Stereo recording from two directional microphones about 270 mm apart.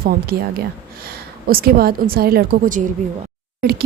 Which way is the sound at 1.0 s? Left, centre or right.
Right.